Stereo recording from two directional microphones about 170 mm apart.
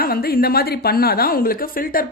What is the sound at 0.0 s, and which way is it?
A woman's voice, 60° left (ahead or behind).